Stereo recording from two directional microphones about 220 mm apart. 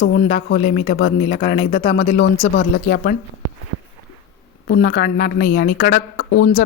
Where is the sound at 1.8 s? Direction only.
50° left (ahead or behind).